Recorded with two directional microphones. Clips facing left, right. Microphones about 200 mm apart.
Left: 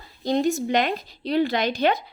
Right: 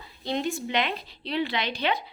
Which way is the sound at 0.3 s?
40° left (ahead or behind).